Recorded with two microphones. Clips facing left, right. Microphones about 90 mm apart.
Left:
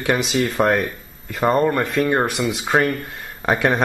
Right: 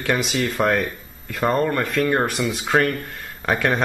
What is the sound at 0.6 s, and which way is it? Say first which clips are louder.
Speech: left 1 dB; 5° left (ahead or behind).